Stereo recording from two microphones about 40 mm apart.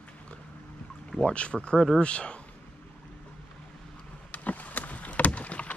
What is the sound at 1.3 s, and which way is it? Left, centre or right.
Speech, left.